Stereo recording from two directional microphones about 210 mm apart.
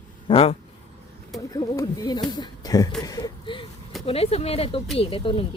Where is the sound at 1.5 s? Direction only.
15° left (ahead or behind).